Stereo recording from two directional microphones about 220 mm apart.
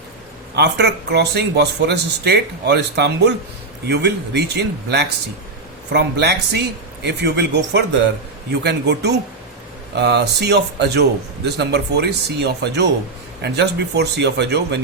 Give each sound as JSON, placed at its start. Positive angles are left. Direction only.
{"t": 0.5, "sound": "a man's voice", "side_deg": -50}